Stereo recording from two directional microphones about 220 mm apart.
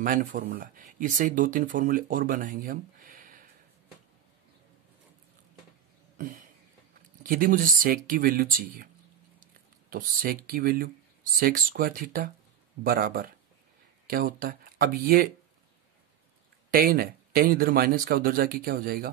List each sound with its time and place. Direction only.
0.0 s speech: 40° right (ahead or behind)
7.2 s speech: 40° right (ahead or behind)
16.7 s speech: 40° right (ahead or behind)